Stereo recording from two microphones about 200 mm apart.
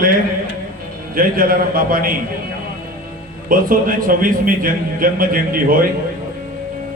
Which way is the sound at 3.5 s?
45° right (ahead or behind).